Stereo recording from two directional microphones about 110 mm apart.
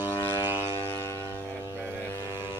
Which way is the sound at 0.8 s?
20° left (ahead or behind).